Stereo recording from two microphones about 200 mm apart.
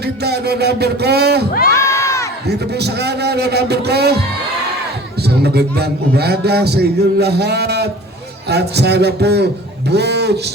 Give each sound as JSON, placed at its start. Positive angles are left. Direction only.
{"t": 0.3, "sound": "a man's voice", "side_deg": -55}
{"t": 1.7, "sound": "crowd", "side_deg": 15}
{"t": 2.8, "sound": "a man's voice", "side_deg": -55}
{"t": 5.4, "sound": "a man's voice", "side_deg": -55}